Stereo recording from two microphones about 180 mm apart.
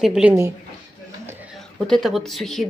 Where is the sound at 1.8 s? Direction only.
Centre (ahead or behind).